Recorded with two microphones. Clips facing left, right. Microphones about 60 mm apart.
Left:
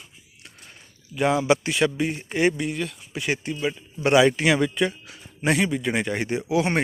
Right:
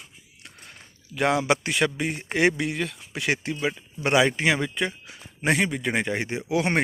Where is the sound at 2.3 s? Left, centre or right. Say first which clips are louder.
Right 1 dB; right.